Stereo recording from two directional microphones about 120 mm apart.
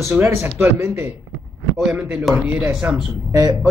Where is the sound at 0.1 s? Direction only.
20° right (ahead or behind).